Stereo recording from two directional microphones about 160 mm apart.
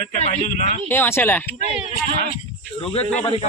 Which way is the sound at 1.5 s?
40° right (ahead or behind).